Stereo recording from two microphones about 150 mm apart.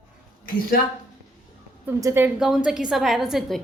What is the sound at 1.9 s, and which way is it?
Speech, 20° right (ahead or behind).